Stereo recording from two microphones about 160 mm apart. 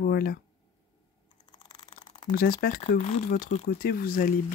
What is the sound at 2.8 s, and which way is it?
Speech, 45° left (ahead or behind).